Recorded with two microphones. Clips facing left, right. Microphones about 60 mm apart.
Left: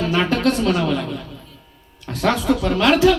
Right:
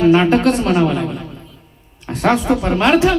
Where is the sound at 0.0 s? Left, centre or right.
Right.